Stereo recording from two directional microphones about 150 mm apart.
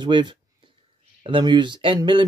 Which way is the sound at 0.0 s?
30° right (ahead or behind).